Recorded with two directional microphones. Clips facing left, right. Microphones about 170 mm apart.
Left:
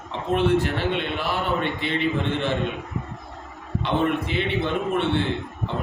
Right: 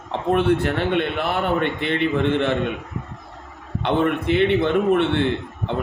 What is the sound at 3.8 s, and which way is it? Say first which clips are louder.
A man's voice: right 4 dB; 60° right (ahead or behind).